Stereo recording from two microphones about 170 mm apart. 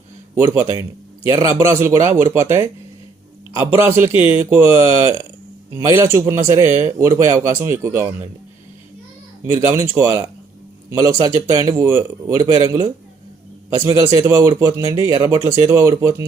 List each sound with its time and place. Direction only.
0.5 s a man's voice: 15° right (ahead or behind)
9.5 s a man's voice: 15° right (ahead or behind)